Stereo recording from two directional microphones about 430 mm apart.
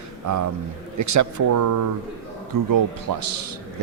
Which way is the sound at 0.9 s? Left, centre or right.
Right.